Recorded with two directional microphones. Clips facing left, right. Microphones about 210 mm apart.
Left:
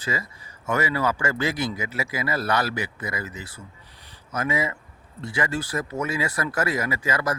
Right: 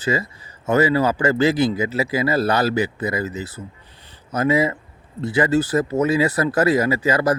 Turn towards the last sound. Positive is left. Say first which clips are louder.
# right 8 dB
turn(degrees=-30)  # may be behind; listen again after turning